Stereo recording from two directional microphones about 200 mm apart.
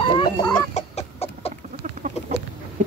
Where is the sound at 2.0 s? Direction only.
35° right (ahead or behind).